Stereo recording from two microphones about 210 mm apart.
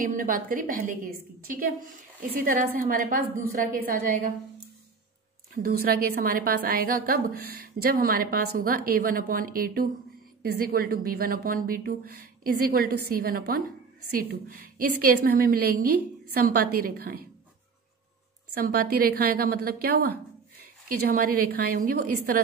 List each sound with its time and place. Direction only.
0.0 s a woman's voice: 40° right (ahead or behind)
5.5 s a woman's voice: 45° right (ahead or behind)
18.5 s a woman's voice: 45° right (ahead or behind)